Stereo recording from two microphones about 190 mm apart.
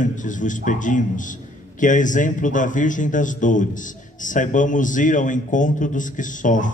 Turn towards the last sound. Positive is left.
turn(degrees=40)  # may be behind; listen again after turning